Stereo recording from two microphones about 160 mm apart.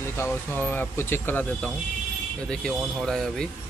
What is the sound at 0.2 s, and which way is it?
Speech, 10° left (ahead or behind).